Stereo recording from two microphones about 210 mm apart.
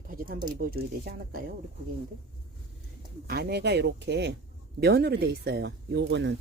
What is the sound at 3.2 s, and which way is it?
Speech, 50° right (ahead or behind).